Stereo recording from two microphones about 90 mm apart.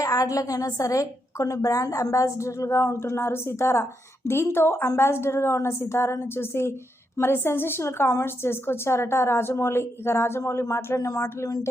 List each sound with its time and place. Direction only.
0.0 s a woman's voice: 40° left (ahead or behind)